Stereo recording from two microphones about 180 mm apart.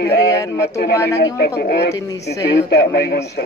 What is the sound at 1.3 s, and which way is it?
Speech, 65° left (ahead or behind).